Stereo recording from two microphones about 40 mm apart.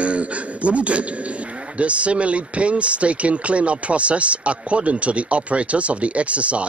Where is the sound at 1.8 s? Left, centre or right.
Right.